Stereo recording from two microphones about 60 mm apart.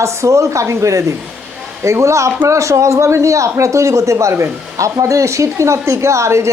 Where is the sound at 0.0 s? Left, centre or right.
Right.